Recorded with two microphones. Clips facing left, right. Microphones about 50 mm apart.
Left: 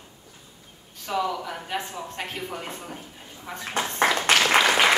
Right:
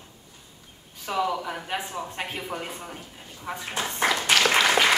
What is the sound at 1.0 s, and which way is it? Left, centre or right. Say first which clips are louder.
Speech: even; centre.